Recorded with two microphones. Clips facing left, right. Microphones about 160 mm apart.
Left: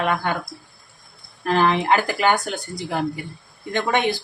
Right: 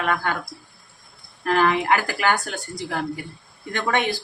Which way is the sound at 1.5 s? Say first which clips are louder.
Left 1 dB; 25° left (ahead or behind).